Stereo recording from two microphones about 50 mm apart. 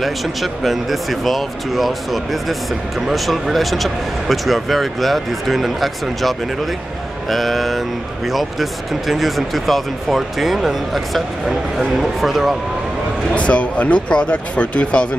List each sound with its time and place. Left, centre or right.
0.0 s speech: centre
3.1 s speech: centre
13.3 s speech: left